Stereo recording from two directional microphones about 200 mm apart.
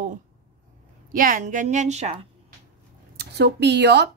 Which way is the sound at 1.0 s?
45° right (ahead or behind).